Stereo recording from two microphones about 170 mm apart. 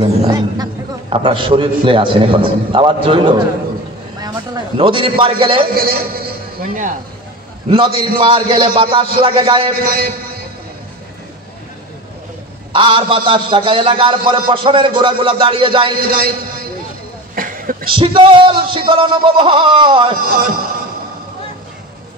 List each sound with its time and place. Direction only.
0.0 s a man's voice: 25° right (ahead or behind)
4.7 s a man's voice: 30° right (ahead or behind)
5.8 s a man's voice: 60° right (ahead or behind)
7.7 s a man's voice: 35° right (ahead or behind)
9.8 s a sound: 60° right (ahead or behind)
12.7 s speech: 30° right (ahead or behind)
16.0 s a man's voice: 60° right (ahead or behind)
17.4 s a sound: 55° right (ahead or behind)
17.9 s speech: 30° right (ahead or behind)
20.2 s a man's voice: 60° right (ahead or behind)